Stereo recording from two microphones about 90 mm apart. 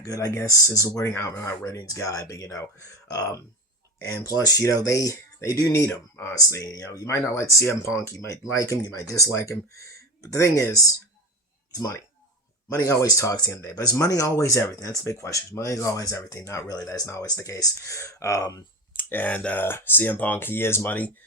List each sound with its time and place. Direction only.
0.0 s speech: 40° left (ahead or behind)
5.8 s speech: 25° left (ahead or behind)
6.3 s speech: 40° left (ahead or behind)
19.0 s speech: 20° left (ahead or behind)